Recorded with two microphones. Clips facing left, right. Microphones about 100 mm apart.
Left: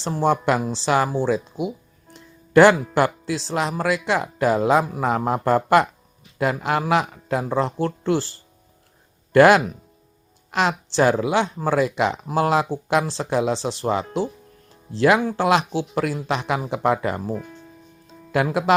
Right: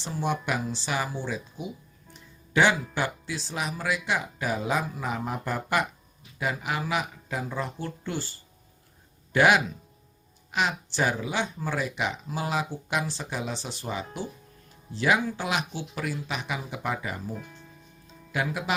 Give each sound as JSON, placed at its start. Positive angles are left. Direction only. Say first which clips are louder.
{"t": 0.0, "sound": "speech", "louder": "left 9 dB", "side_deg": 90}
{"t": 2.1, "sound": "music", "louder": "left 10 dB", "side_deg": 90}
{"t": 2.9, "sound": "speech", "louder": "left 10 dB", "side_deg": 90}
{"t": 10.5, "sound": "speech", "louder": "left 7 dB", "side_deg": 90}
{"t": 17.3, "sound": "speech", "louder": "left 9 dB", "side_deg": 50}